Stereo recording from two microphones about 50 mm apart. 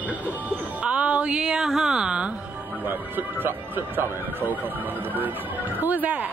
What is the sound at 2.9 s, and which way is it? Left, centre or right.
Speech, right.